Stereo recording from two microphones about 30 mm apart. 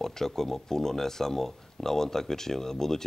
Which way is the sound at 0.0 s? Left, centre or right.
Centre.